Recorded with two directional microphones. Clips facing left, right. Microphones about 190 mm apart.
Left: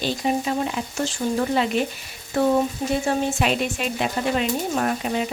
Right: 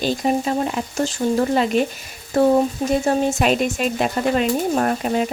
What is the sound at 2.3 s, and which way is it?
Speech, 40° right (ahead or behind).